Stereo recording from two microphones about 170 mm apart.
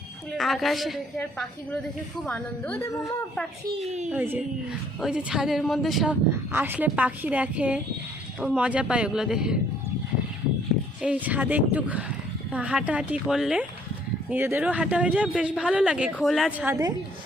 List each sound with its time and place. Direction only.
0.3 s a woman's voice: centre (ahead or behind); by 3.2 s 20° left (ahead or behind)
4.1 s a woman's voice: 10° right (ahead or behind)
6.5 s a woman's voice: 10° right (ahead or behind)
11.0 s speech: 10° right (ahead or behind)
16.6 s a woman's voice: 20° right (ahead or behind)